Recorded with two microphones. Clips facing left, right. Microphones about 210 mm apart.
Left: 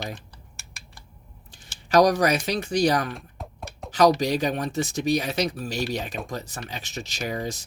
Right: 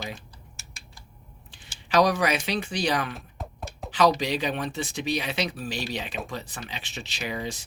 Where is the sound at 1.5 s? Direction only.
45° left (ahead or behind).